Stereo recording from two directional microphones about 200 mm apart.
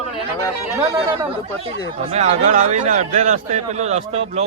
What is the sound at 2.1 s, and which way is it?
A man's voice, 35° right (ahead or behind).